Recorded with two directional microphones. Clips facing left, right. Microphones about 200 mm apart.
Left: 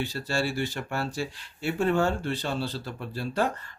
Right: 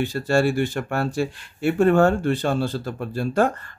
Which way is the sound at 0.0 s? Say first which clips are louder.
Right 9 dB; 55° right (ahead or behind).